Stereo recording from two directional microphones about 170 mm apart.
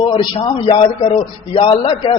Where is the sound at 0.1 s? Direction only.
25° left (ahead or behind).